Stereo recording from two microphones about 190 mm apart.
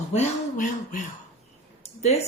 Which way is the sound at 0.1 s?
40° left (ahead or behind).